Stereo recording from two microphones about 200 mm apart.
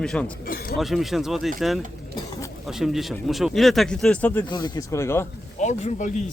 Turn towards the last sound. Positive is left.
turn(degrees=35)  # may be behind; listen again after turning